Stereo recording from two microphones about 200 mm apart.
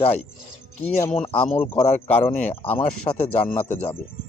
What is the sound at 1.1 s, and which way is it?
Speech, 30° left (ahead or behind).